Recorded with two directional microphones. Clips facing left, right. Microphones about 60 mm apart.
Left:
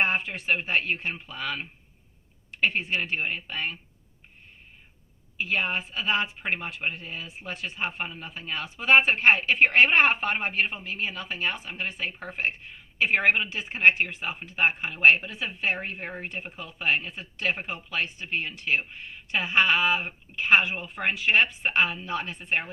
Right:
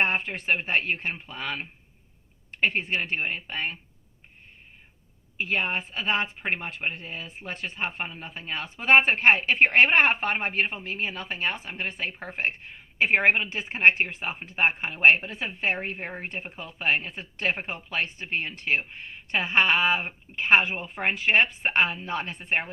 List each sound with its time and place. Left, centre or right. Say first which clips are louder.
0.0 s speech: even; right
5.4 s speech: even; right